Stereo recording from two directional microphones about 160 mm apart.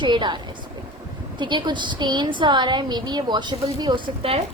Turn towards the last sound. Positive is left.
turn(degrees=-35)  # may be behind; listen again after turning